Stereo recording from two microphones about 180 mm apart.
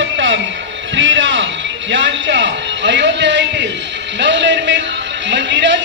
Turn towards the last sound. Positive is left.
turn(degrees=-80)